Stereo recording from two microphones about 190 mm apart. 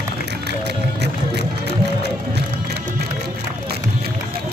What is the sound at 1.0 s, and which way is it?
Music, 60° right (ahead or behind).